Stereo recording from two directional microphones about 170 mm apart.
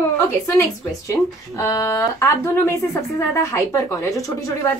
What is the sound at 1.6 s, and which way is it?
A woman's voice, 20° left (ahead or behind).